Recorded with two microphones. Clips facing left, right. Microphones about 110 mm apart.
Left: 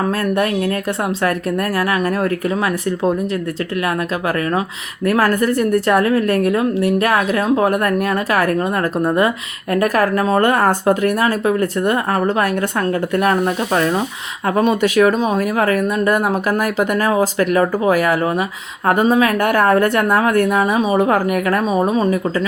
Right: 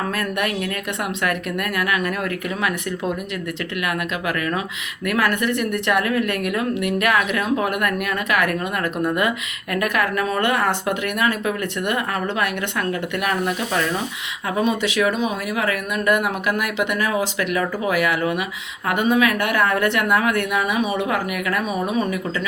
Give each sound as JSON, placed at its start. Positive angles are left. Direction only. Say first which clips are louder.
{"t": 0.1, "sound": "a woman's voice", "louder": "left 6 dB", "side_deg": 30}
{"t": 5.0, "sound": "a woman's voice", "louder": "left 6 dB", "side_deg": 40}
{"t": 14.4, "sound": "a woman's voice", "louder": "left 6 dB", "side_deg": 55}